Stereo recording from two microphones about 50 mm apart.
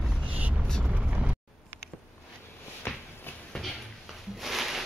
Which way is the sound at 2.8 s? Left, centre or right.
Left.